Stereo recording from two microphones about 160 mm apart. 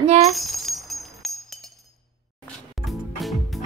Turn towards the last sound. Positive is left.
turn(degrees=0)  # may be behind; listen again after turning